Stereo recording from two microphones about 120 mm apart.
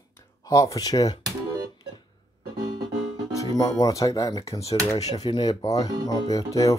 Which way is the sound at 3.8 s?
30° left (ahead or behind).